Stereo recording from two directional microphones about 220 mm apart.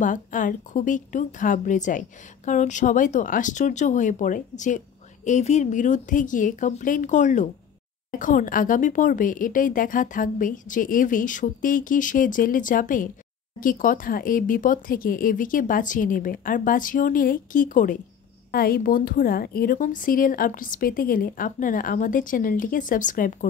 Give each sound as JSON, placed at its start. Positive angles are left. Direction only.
{"t": 0.0, "sound": "a woman's voice", "side_deg": 35}